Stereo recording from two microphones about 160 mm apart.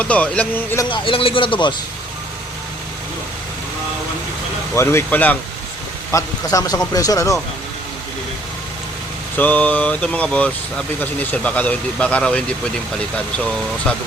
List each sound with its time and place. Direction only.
0.0 s speech: 10° left (ahead or behind)
0.9 s a man's voice: 30° left (ahead or behind)
4.7 s speech: 15° left (ahead or behind)
9.4 s speech: 10° left (ahead or behind)